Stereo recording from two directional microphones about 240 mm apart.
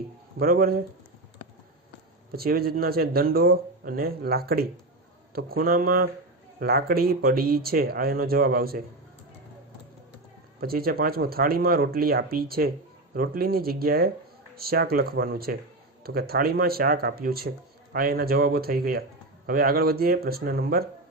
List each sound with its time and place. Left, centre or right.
0.3 s speech: right
2.3 s speech: right
10.6 s speech: right